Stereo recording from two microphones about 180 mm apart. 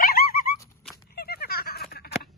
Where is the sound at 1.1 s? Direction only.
60° left (ahead or behind).